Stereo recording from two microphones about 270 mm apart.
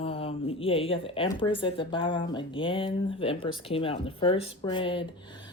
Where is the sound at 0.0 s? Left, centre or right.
Left.